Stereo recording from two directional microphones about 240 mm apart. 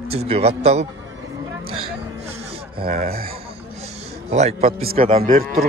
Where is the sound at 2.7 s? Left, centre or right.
Right.